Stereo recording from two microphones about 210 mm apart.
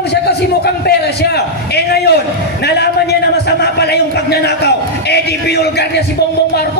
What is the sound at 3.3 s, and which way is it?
A man's voice, 50° left (ahead or behind).